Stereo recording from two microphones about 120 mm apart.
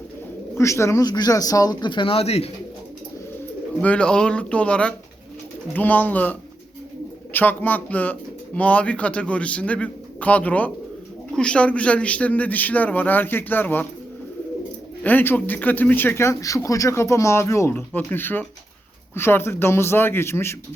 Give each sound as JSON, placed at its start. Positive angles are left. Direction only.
{"t": 0.5, "sound": "speech", "side_deg": 25}
{"t": 3.8, "sound": "a man's voice", "side_deg": 10}
{"t": 7.3, "sound": "a man's voice", "side_deg": 15}
{"t": 15.0, "sound": "a man's voice", "side_deg": 15}